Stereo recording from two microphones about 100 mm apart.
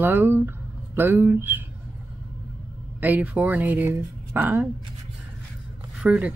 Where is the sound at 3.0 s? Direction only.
15° right (ahead or behind).